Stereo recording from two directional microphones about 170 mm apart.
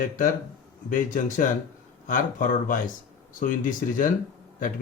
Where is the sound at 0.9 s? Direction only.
50° left (ahead or behind).